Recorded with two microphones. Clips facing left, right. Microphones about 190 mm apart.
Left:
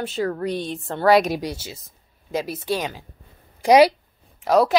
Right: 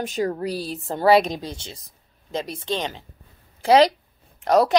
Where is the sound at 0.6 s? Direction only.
35° right (ahead or behind).